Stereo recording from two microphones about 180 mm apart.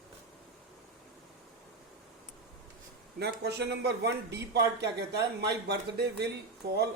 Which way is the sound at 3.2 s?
65° right (ahead or behind).